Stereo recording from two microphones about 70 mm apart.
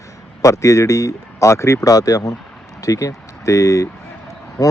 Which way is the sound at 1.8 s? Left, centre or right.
Left.